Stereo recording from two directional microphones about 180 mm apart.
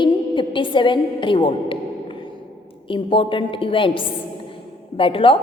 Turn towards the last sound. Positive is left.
turn(degrees=30)  # may be behind; listen again after turning